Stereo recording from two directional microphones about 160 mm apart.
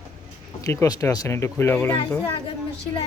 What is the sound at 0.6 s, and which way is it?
Speech, 20° left (ahead or behind).